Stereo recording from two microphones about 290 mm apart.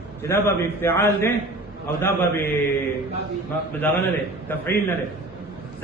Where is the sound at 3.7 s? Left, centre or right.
Centre.